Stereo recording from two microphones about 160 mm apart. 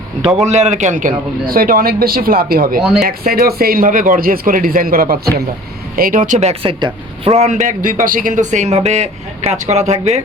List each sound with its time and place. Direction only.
0.4 s a man's voice: 45° right (ahead or behind); by 2.8 s 65° right (ahead or behind)
2.8 s speech: 5° right (ahead or behind)
3.2 s a man's voice: 70° right (ahead or behind); by 7.3 s 30° right (ahead or behind)
7.3 s a man's voice: 50° right (ahead or behind)